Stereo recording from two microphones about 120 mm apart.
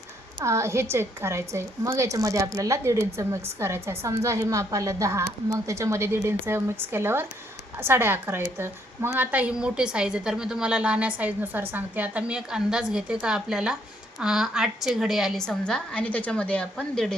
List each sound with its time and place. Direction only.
0.4 s a woman's voice: 25° right (ahead or behind); by 17.2 s 5° left (ahead or behind)